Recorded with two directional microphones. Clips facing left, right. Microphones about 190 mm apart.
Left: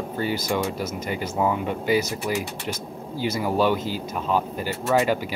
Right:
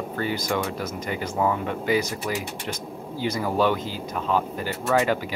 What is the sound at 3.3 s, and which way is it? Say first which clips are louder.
Speech: left 1 dB; 10° left (ahead or behind).